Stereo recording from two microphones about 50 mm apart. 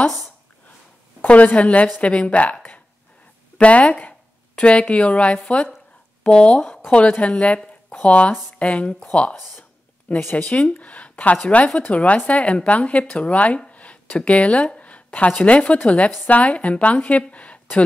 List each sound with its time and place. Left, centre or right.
1.2 s speech: left
3.5 s speech: left
17.3 s a sound: left